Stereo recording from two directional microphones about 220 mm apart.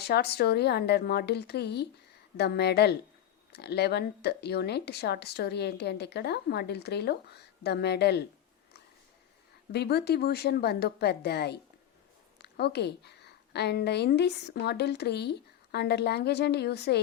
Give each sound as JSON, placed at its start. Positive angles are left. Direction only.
{"t": 0.0, "sound": "speech", "side_deg": 45}
{"t": 9.7, "sound": "a woman's voice", "side_deg": 50}